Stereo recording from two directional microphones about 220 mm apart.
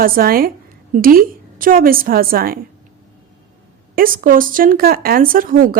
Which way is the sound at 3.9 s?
40° right (ahead or behind).